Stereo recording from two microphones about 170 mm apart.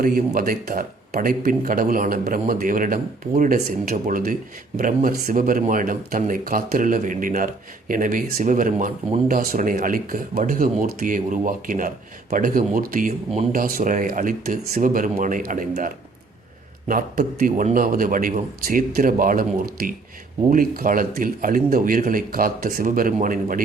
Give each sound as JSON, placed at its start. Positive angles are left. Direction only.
{"t": 0.0, "sound": "speech", "side_deg": -55}
{"t": 16.9, "sound": "speech", "side_deg": -55}